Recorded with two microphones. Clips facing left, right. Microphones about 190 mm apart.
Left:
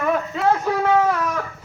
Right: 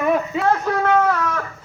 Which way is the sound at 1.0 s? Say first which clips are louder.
Right 1 dB; 15° left (ahead or behind).